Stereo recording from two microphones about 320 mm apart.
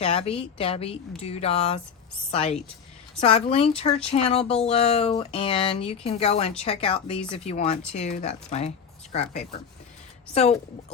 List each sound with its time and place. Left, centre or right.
0.0 s speech: centre
10.3 s speech: centre